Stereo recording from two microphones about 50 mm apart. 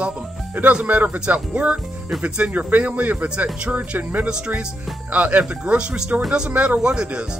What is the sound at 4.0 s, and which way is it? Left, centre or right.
Speech, right.